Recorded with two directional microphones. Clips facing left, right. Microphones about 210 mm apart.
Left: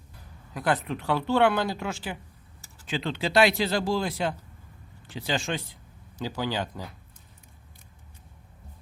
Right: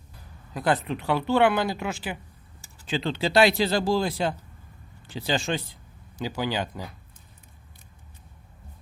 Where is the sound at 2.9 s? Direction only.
30° right (ahead or behind).